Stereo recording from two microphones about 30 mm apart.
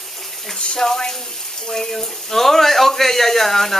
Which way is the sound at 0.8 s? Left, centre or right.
Centre.